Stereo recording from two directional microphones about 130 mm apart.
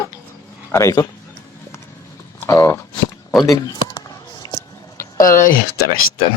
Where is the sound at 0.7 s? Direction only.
25° left (ahead or behind).